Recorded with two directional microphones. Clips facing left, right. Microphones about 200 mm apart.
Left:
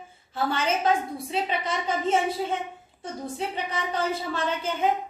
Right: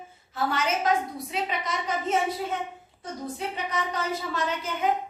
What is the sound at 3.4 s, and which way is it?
A woman's voice, 30° left (ahead or behind).